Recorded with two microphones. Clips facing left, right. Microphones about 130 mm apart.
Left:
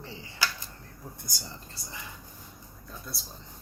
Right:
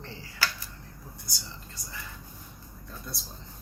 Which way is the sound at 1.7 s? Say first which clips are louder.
Even; 20° left (ahead or behind).